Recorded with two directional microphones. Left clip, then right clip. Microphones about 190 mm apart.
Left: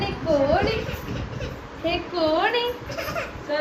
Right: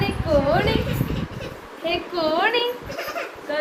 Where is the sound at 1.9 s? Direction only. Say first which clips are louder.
Even; 20° right (ahead or behind).